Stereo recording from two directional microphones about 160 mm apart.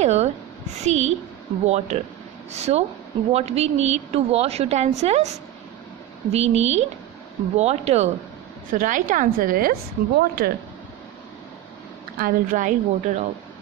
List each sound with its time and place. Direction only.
0.0 s a woman's voice: 45° right (ahead or behind)
8.7 s a woman's voice: 55° right (ahead or behind); by 10.5 s 75° right (ahead or behind)
12.2 s a woman's voice: 60° right (ahead or behind)